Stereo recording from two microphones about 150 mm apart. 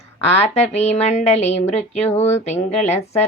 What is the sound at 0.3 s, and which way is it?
Mantra, 45° left (ahead or behind).